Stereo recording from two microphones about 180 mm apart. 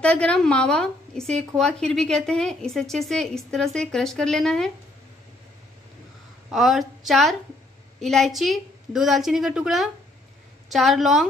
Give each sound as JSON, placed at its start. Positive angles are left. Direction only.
{"t": 0.0, "sound": "a woman's voice", "side_deg": 5}
{"t": 6.5, "sound": "a woman's voice", "side_deg": 0}